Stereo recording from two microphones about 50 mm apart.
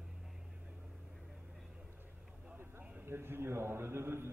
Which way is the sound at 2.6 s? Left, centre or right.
Right.